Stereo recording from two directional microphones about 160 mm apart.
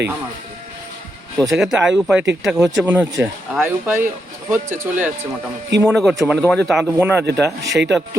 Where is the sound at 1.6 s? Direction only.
5° right (ahead or behind).